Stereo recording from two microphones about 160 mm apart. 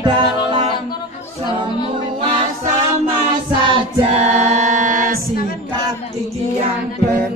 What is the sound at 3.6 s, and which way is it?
Female singing, 40° right (ahead or behind).